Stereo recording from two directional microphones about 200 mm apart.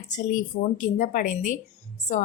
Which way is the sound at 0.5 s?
45° left (ahead or behind).